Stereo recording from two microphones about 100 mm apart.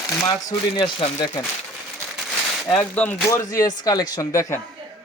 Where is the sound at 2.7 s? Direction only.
15° left (ahead or behind).